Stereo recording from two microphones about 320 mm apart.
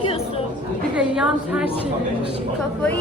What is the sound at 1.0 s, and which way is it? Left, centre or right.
Speech, centre.